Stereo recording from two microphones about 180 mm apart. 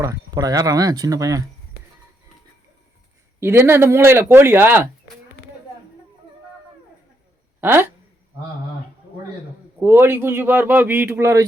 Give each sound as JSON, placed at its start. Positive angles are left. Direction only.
{"t": 0.0, "sound": "speech", "side_deg": -20}
{"t": 3.4, "sound": "a man's voice", "side_deg": -15}
{"t": 7.6, "sound": "speech", "side_deg": -10}
{"t": 9.8, "sound": "a man's voice", "side_deg": -10}